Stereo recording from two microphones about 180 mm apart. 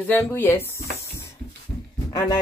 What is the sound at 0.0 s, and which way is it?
Speech, 10° left (ahead or behind).